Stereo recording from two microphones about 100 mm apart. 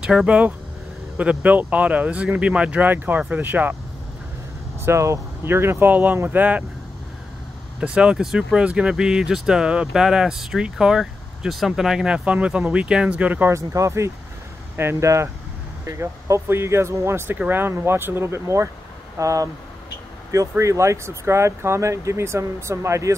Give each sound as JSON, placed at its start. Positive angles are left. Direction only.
{"t": 0.0, "sound": "speech", "side_deg": -10}
{"t": 4.8, "sound": "speech", "side_deg": -30}
{"t": 7.8, "sound": "speech", "side_deg": -10}
{"t": 13.5, "sound": "speech", "side_deg": -30}